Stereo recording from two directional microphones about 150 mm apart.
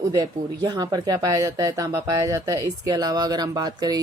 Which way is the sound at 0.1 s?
25° right (ahead or behind).